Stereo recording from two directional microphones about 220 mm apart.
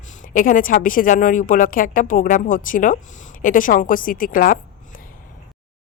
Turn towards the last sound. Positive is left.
turn(degrees=40)  # may be behind; listen again after turning